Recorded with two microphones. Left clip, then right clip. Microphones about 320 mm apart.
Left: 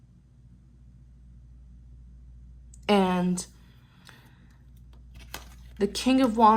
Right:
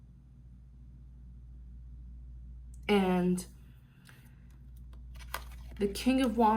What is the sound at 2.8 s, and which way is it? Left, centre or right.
Speech, centre.